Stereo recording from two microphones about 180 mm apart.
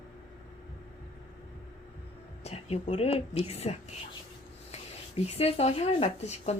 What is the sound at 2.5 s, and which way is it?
Speech, 35° left (ahead or behind).